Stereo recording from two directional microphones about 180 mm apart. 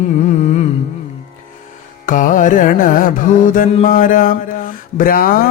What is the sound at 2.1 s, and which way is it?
Music, 45° left (ahead or behind).